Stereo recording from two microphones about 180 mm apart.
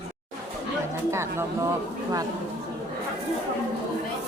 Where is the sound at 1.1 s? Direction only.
15° right (ahead or behind).